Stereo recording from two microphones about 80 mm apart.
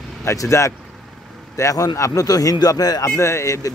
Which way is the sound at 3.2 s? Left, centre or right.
Left.